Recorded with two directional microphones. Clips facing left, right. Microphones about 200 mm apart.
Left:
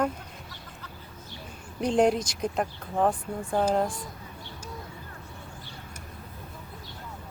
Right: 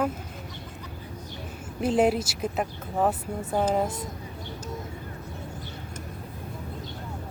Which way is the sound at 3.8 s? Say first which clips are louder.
Right 2 dB; 25° right (ahead or behind).